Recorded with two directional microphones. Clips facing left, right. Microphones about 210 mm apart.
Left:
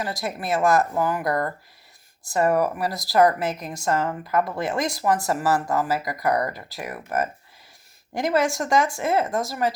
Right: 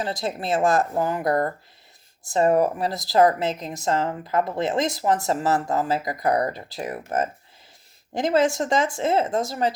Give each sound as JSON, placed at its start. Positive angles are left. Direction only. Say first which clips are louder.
{"t": 0.0, "sound": "speech", "louder": "right 2 dB", "side_deg": -25}